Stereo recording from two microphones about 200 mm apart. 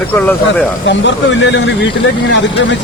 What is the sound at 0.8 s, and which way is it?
Speech, 65° left (ahead or behind).